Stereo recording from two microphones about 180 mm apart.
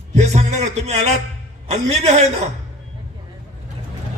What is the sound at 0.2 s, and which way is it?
A man's voice, 40° right (ahead or behind).